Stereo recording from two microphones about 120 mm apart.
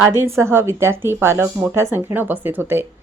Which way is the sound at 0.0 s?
20° right (ahead or behind).